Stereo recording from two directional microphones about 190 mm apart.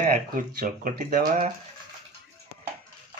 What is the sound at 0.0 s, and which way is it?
Speech, 45° right (ahead or behind).